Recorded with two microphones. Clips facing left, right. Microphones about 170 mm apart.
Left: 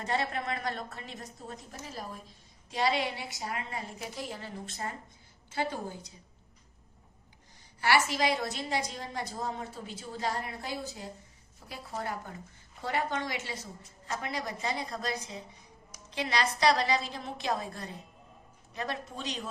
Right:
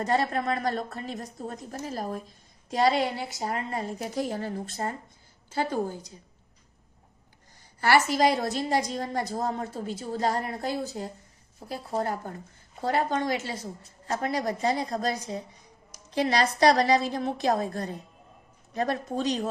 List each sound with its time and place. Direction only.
0.0 s a woman's voice: 40° right (ahead or behind)
7.8 s a woman's voice: 45° right (ahead or behind)